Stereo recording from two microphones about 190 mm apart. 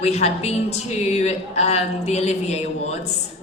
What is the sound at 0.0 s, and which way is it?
Speech, 35° left (ahead or behind).